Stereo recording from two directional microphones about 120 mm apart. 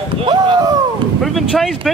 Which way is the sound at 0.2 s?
40° right (ahead or behind).